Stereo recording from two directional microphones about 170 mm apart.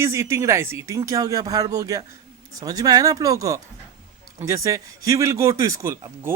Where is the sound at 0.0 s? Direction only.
15° right (ahead or behind).